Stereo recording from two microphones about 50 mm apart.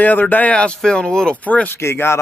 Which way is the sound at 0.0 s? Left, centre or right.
Left.